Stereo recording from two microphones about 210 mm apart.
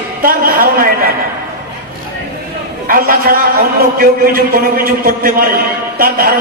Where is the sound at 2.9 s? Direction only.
45° right (ahead or behind).